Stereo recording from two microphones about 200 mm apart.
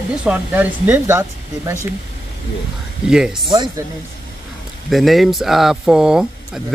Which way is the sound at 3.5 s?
20° right (ahead or behind).